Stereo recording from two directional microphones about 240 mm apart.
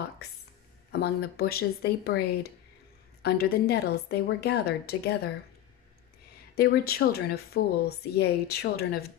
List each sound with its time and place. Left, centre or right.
0.9 s speech: left
6.5 s speech: left